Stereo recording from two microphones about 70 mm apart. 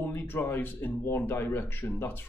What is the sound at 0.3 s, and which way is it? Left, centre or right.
Speech, left.